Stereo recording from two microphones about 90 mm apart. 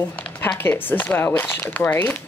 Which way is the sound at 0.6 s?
25° left (ahead or behind).